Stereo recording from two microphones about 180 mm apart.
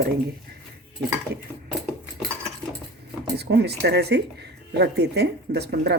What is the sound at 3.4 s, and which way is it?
Speech, 65° right (ahead or behind).